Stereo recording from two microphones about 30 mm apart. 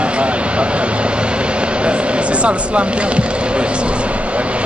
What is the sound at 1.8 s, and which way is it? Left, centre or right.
Basketball bounce, right.